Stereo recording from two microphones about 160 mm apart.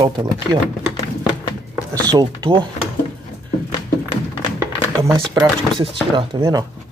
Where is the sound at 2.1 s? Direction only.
25° right (ahead or behind).